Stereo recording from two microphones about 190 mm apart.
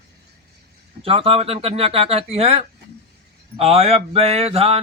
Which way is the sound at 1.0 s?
30° right (ahead or behind).